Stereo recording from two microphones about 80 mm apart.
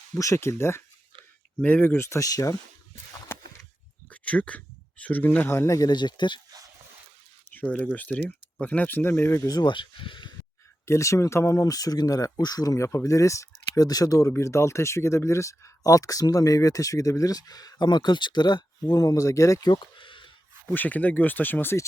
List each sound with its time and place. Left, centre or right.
0.2 s speech: left
1.6 s speech: centre
2.0 s speech: left
4.1 s a sound: centre
5.5 s speech: left
5.9 s speech: left
7.5 s speech: centre
9.5 s speech: left
9.7 s speech: left
10.8 s speech: left
13.8 s speech: left
19.7 s a sound: left
20.7 s speech: left